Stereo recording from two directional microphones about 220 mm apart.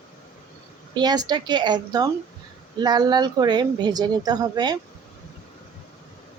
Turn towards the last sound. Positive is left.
turn(degrees=-20)  # may be behind; listen again after turning